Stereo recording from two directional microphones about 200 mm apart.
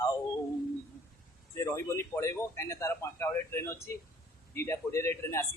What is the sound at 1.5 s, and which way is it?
A man's voice, 15° left (ahead or behind).